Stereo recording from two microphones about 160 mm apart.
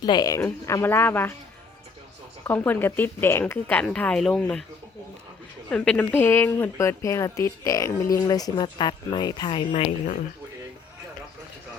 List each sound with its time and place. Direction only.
0.0 s a woman's voice: 25° left (ahead or behind)
2.4 s a woman's voice: 10° left (ahead or behind)
5.6 s a woman's voice: 5° left (ahead or behind); by 9.9 s 35° left (ahead or behind)